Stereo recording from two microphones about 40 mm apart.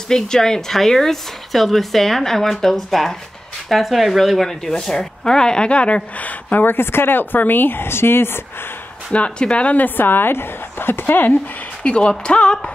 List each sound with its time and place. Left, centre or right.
0.1 s a woman's voice: centre
4.5 s speech: centre; by 6.6 s left
6.6 s a woman's voice: left
7.3 s speech: left
9.1 s speech: left
9.8 s a woman's voice: left
11.8 s speech: left